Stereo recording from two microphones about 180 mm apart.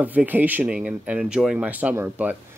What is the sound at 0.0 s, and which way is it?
Speech, 10° right (ahead or behind).